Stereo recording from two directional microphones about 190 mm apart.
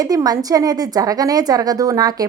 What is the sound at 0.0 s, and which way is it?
A woman's voice, 20° right (ahead or behind).